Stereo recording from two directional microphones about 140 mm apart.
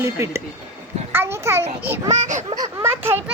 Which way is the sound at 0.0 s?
20° right (ahead or behind).